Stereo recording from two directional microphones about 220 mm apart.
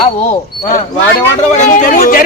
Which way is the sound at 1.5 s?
35° left (ahead or behind).